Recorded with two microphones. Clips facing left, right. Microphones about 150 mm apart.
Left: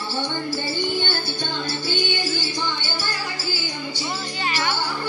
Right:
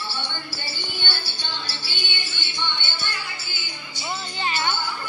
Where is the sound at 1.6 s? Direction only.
45° left (ahead or behind).